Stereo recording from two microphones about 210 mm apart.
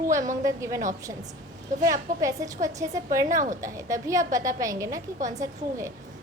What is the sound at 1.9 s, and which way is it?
A woman's voice, 15° right (ahead or behind).